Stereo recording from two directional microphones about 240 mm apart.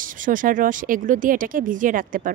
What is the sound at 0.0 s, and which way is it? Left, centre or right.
Speech, right.